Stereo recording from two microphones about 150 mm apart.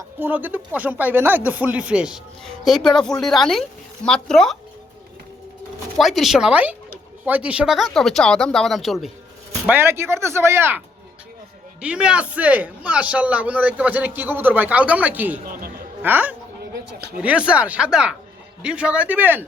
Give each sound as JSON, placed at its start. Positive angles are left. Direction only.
{"t": 0.2, "sound": "a man's voice", "side_deg": -10}
{"t": 6.0, "sound": "speech", "side_deg": 0}
{"t": 9.6, "sound": "a man's voice", "side_deg": -15}